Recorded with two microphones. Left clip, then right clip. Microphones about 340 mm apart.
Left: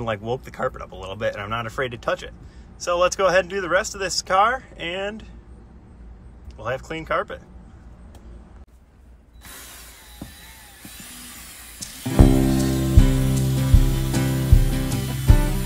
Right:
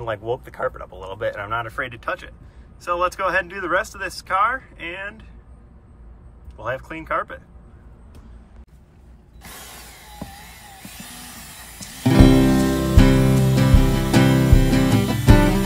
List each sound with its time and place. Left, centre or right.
0.0 s speech: centre
6.6 s speech: centre
9.4 s mechanisms: centre
11.8 s music: centre